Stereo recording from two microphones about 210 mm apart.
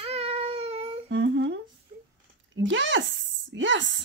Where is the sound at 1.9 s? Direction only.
40° right (ahead or behind).